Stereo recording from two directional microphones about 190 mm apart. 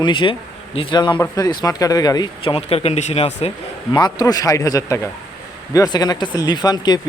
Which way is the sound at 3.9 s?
20° left (ahead or behind).